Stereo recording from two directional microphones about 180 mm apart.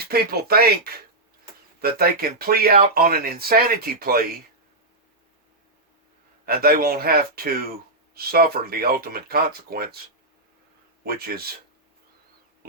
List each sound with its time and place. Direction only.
0.0 s speech: 60° right (ahead or behind)
6.4 s speech: 55° right (ahead or behind)
11.0 s speech: 55° right (ahead or behind)